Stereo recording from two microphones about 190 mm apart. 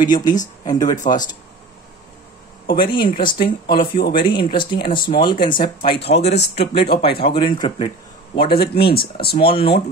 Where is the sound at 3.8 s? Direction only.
25° left (ahead or behind).